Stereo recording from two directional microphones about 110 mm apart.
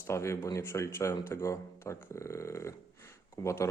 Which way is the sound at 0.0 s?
25° left (ahead or behind).